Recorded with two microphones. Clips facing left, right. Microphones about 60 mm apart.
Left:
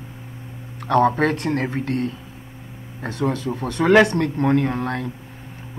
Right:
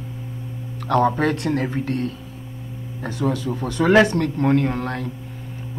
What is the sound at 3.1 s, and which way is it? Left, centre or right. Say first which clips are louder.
Speech: even; left.